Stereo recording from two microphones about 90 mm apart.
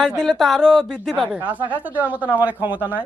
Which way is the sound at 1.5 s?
15° right (ahead or behind).